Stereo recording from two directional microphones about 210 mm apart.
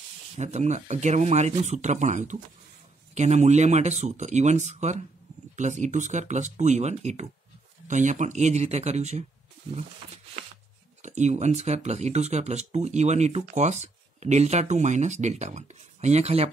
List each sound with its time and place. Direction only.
0.4 s speech: 35° right (ahead or behind)
11.0 s speech: 35° right (ahead or behind)